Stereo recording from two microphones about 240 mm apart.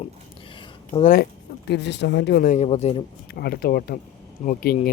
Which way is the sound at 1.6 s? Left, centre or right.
Left.